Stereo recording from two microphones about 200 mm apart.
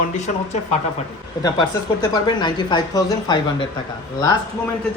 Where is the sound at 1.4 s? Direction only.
20° left (ahead or behind).